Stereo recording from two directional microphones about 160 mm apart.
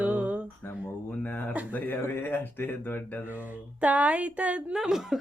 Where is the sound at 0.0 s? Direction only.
10° right (ahead or behind).